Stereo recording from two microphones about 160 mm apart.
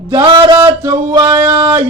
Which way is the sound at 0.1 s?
20° right (ahead or behind).